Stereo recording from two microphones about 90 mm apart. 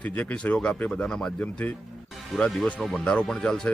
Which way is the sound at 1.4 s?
15° left (ahead or behind).